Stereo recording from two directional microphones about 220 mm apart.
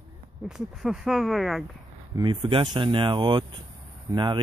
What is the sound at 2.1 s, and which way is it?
Speech, 20° right (ahead or behind).